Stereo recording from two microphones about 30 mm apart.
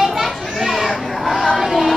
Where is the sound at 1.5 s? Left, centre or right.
Centre.